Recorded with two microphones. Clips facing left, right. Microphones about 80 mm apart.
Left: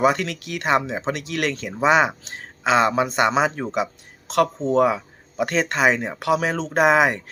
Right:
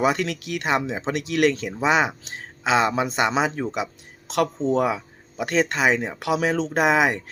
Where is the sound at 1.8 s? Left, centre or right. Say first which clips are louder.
Left 3 dB; left.